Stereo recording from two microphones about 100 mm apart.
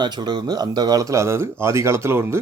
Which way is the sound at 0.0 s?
45° right (ahead or behind).